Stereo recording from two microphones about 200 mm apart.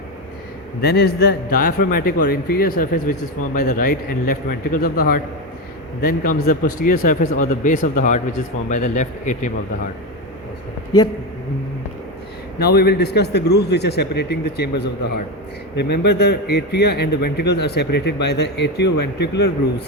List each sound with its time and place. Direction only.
0.8 s a man's voice: 55° left (ahead or behind); by 9.5 s 35° left (ahead or behind)
12.5 s a man's voice: 55° left (ahead or behind)